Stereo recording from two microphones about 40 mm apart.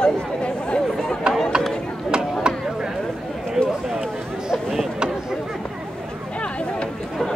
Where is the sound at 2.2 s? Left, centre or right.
Centre.